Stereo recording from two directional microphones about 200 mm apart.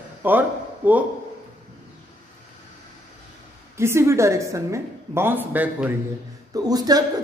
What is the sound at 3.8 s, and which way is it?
A woman's voice, 15° right (ahead or behind).